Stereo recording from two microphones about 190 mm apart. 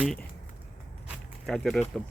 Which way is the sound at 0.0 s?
Centre (ahead or behind).